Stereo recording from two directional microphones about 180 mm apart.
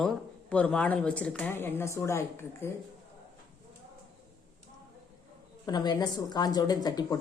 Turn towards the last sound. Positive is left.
turn(degrees=20)  # may be behind; listen again after turning